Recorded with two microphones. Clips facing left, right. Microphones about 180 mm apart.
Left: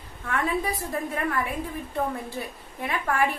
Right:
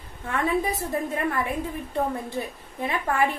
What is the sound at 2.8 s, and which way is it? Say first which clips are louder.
Speech: right 1 dB; 20° right (ahead or behind).